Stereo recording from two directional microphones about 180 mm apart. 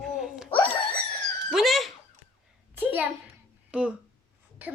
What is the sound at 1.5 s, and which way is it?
Speech, centre (ahead or behind).